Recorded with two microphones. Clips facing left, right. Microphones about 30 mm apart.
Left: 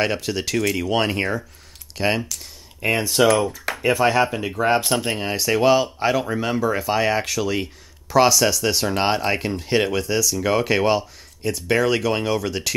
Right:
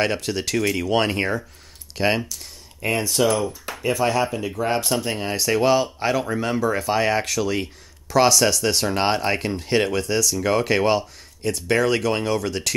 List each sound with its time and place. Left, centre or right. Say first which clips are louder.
0.0 s speech: even; centre
2.8 s speech: left 3 dB; centre
5.1 s speech: left 1 dB; centre